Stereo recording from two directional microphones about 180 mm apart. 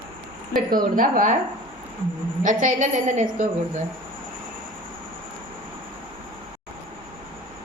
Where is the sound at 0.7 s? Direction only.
50° right (ahead or behind).